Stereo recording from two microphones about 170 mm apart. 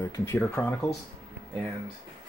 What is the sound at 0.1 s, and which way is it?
Speech, 15° left (ahead or behind).